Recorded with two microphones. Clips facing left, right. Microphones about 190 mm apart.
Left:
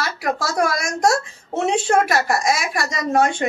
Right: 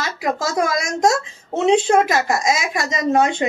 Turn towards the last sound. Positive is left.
turn(degrees=-20)  # may be behind; listen again after turning